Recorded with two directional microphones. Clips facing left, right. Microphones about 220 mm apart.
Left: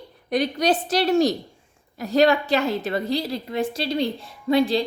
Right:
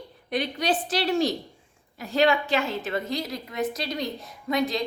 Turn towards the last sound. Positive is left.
turn(degrees=30)  # may be behind; listen again after turning